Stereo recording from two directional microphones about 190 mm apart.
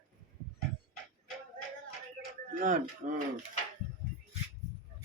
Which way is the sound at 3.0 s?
35° right (ahead or behind).